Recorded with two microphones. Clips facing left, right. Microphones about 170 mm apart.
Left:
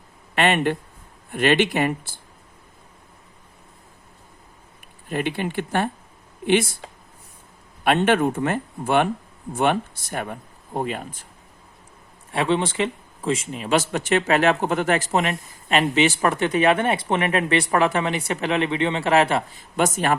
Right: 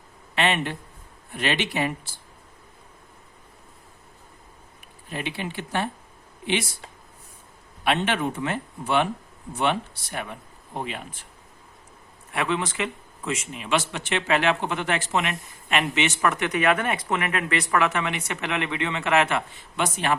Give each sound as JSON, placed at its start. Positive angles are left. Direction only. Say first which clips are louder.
{"t": 0.3, "sound": "speech", "louder": "left 5 dB", "side_deg": 50}
{"t": 5.0, "sound": "speech", "louder": "left 6 dB", "side_deg": 50}
{"t": 7.9, "sound": "speech", "louder": "left 6 dB", "side_deg": 50}
{"t": 12.3, "sound": "speech", "louder": "left 5 dB", "side_deg": 30}